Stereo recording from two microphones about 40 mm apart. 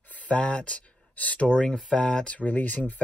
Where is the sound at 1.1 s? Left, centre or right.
Left.